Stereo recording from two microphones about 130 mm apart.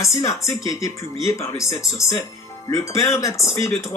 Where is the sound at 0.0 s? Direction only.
25° left (ahead or behind).